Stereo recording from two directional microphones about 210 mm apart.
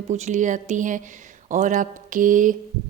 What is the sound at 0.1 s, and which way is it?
Speech, 35° right (ahead or behind).